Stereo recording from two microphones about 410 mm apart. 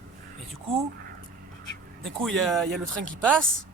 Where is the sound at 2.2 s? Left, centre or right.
Centre.